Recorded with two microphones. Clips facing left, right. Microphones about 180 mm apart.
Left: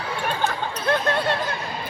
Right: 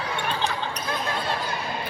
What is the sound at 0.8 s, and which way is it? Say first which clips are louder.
Speech: left 9 dB; 70° left (ahead or behind).